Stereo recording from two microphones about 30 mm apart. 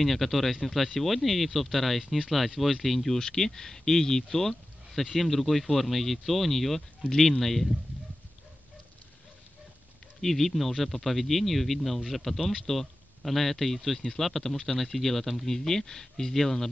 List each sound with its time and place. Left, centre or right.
0.0 s speech: centre
3.2 s speech: centre
10.2 s speech: centre